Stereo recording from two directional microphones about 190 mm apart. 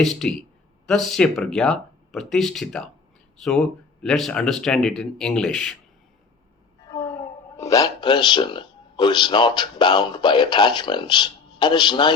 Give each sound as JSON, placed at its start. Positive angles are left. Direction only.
{"t": 0.0, "sound": "speech", "side_deg": 0}
{"t": 4.0, "sound": "speech", "side_deg": 0}
{"t": 6.9, "sound": "speech", "side_deg": 10}